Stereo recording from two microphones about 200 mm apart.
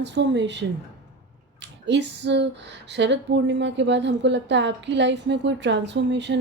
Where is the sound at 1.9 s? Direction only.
60° right (ahead or behind).